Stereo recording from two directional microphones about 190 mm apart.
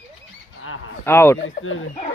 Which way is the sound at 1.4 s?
90° left.